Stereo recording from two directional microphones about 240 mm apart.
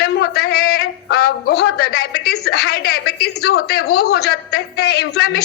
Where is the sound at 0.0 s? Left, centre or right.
Left.